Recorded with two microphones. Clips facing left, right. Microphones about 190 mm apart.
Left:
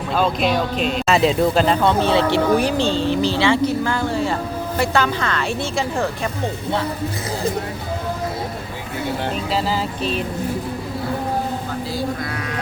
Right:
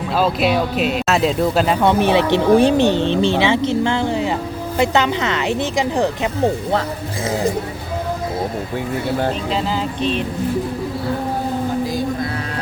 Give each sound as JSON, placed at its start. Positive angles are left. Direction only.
{"t": 0.2, "sound": "speech", "side_deg": -5}
{"t": 1.8, "sound": "speech", "side_deg": -15}